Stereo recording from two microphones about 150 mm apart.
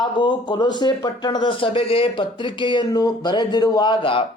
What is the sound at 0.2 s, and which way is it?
A man's voice, 30° left (ahead or behind).